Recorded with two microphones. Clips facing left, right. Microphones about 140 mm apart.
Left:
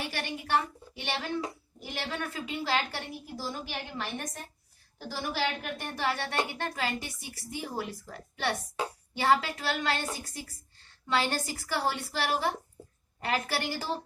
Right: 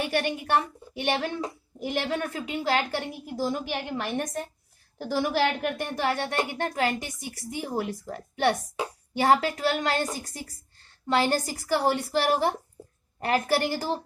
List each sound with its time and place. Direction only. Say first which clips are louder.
0.0 s a woman's voice: right 9 dB; 55° right (ahead or behind)